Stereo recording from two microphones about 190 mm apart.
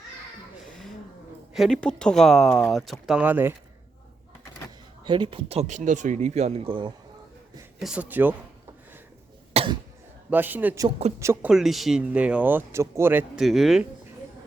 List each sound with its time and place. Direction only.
0.6 s a sound: centre (ahead or behind)
1.5 s speech: centre (ahead or behind)
5.0 s speech: 25° right (ahead or behind)
7.8 s a man's voice: 5° right (ahead or behind)
9.5 s cough: 30° right (ahead or behind)
10.2 s a man's voice: 10° right (ahead or behind)
11.5 s speech: centre (ahead or behind)